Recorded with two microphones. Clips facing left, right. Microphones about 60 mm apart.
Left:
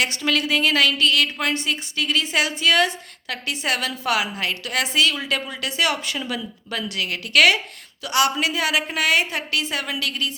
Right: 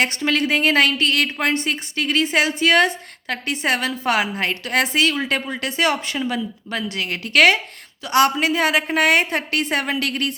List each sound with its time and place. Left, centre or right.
0.2 s a woman's voice: right